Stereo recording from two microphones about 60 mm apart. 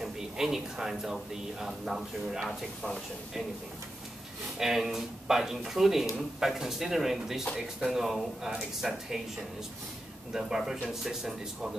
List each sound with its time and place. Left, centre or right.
0.0 s speech: centre
4.6 s speech: centre
10.3 s speech: centre